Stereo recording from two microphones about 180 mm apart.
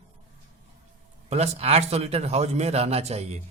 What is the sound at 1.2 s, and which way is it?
Speech, 35° right (ahead or behind).